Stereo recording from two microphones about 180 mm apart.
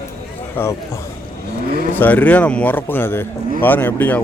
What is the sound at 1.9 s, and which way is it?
Speech, 10° left (ahead or behind).